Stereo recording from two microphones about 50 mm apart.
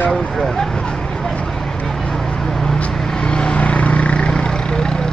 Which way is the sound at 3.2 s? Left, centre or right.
Centre.